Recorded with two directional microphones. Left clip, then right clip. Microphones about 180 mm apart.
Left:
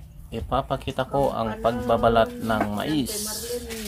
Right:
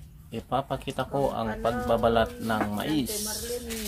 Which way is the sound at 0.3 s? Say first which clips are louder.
Left 4 dB; 15° left (ahead or behind).